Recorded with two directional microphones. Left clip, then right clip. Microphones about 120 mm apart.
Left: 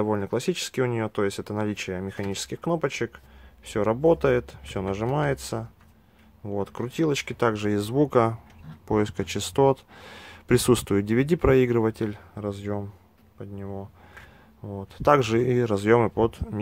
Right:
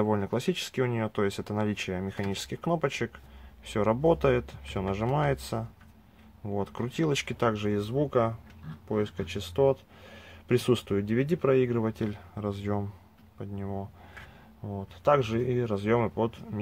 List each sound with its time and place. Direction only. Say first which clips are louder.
0.0 s speech: left 3 dB; 15° left (ahead or behind); by 11.9 s 45° left (ahead or behind)
11.9 s speech: left 4 dB; 25° left (ahead or behind); by 13.8 s centre (ahead or behind)
14.6 s speech: left 2 dB; 15° left (ahead or behind)
15.0 s speech: left 5 dB; 45° left (ahead or behind)